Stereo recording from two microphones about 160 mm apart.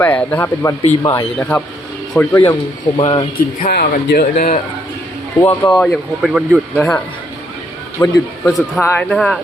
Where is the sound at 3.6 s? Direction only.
75° left (ahead or behind).